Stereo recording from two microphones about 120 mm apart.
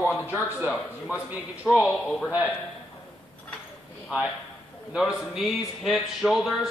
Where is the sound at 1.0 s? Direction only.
10° right (ahead or behind).